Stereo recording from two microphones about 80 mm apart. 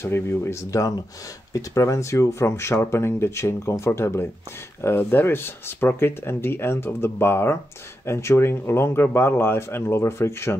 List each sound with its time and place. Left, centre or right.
0.0 s speech: left